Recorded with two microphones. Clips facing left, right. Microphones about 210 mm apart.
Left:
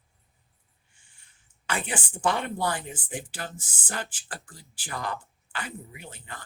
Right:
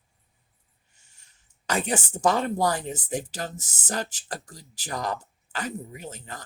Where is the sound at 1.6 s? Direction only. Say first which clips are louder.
Right 5 dB; 40° right (ahead or behind).